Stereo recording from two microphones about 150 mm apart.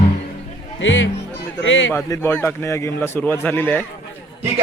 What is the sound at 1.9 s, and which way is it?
A man's voice, 20° left (ahead or behind).